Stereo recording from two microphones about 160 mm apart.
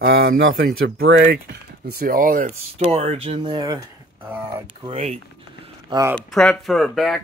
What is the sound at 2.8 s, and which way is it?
Speech, 40° right (ahead or behind).